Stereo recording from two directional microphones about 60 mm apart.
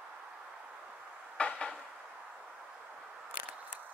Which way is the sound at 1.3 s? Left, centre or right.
Centre.